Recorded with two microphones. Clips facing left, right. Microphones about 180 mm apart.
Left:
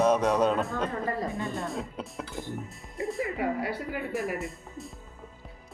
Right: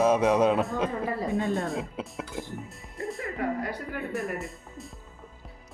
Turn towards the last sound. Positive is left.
turn(degrees=0)  # may be behind; listen again after turning